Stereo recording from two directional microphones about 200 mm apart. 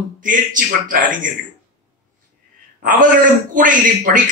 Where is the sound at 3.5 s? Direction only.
40° right (ahead or behind).